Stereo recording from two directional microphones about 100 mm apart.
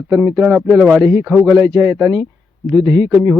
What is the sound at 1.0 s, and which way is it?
Speech, 40° right (ahead or behind).